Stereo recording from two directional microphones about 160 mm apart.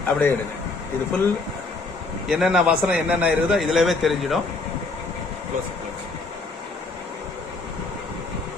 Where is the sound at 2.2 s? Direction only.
5° right (ahead or behind).